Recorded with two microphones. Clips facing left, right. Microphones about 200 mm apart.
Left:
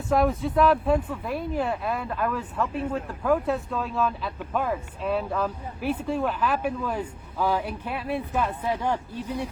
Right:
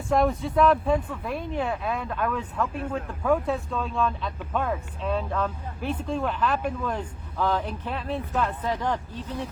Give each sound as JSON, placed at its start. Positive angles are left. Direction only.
{"t": 0.1, "sound": "speech", "side_deg": 0}